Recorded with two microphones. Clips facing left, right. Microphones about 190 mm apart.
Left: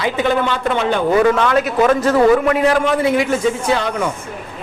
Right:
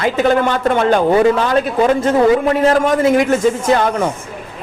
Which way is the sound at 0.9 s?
35° right (ahead or behind).